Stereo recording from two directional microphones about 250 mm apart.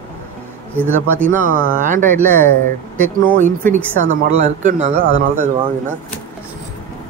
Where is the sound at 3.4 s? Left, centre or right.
Right.